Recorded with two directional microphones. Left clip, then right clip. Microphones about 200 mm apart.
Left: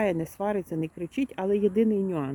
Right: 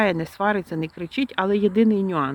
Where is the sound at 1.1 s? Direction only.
40° right (ahead or behind).